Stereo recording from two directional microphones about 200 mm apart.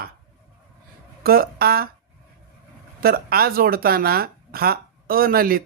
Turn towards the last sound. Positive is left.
turn(degrees=-45)  # may be behind; listen again after turning